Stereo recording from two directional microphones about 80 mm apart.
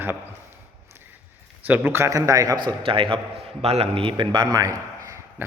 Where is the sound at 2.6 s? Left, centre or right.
Right.